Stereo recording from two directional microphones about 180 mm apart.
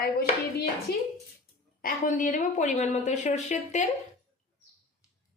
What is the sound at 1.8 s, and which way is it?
A woman's voice, 45° left (ahead or behind).